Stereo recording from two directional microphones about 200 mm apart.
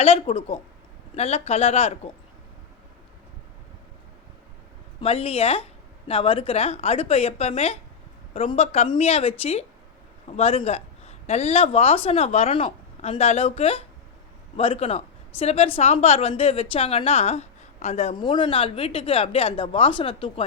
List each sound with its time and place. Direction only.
0.0 s a woman's voice: 30° left (ahead or behind)
4.9 s a woman's voice: 30° left (ahead or behind)